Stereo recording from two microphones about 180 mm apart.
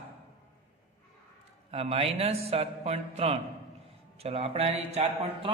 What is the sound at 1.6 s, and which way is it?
A man's voice, 35° right (ahead or behind).